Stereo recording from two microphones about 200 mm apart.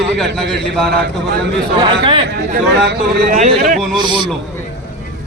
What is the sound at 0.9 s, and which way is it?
Speech, 55° right (ahead or behind).